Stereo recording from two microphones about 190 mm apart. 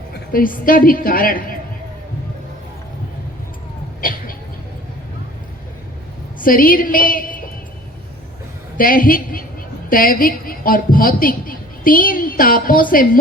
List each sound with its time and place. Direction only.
0.3 s a woman's voice: 45° left (ahead or behind)
4.0 s a sound: 45° left (ahead or behind)
6.4 s a woman's voice: 50° left (ahead or behind)
8.8 s a woman's voice: 45° left (ahead or behind)